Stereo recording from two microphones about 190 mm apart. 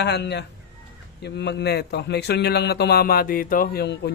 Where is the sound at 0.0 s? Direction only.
60° left (ahead or behind).